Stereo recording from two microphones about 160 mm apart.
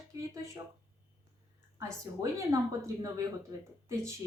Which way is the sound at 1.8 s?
20° right (ahead or behind).